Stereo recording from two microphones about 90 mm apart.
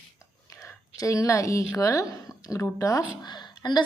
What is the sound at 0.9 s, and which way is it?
A woman's voice, 40° left (ahead or behind).